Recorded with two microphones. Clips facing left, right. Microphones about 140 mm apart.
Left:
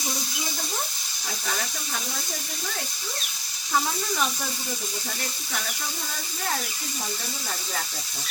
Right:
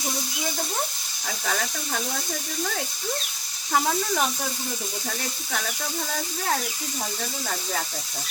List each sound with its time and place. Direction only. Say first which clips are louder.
3.7 s speech: right 3 dB; 60° right (ahead or behind)